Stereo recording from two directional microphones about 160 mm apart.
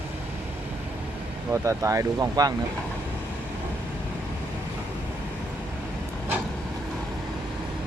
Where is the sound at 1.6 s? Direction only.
20° right (ahead or behind).